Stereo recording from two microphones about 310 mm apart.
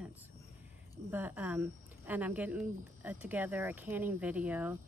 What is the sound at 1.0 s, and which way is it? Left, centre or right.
Speech, centre.